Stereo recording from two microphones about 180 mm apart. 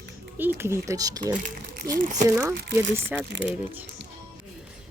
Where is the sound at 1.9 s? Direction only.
45° right (ahead or behind).